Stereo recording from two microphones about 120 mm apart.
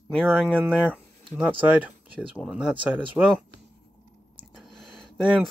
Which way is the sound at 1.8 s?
10° right (ahead or behind).